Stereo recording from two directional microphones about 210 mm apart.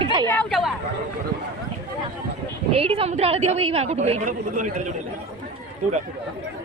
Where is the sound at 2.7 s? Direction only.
25° right (ahead or behind).